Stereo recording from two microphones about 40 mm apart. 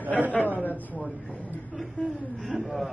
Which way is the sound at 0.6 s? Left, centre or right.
Left.